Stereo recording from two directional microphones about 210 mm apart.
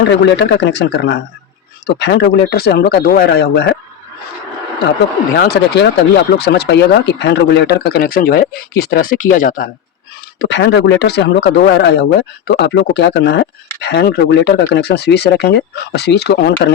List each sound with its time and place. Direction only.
0.0 s speech: 55° left (ahead or behind)
5.4 s speech: 50° left (ahead or behind)
10.5 s speech: 55° left (ahead or behind)